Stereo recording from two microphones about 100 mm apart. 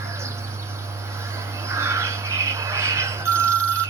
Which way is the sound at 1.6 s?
30° right (ahead or behind).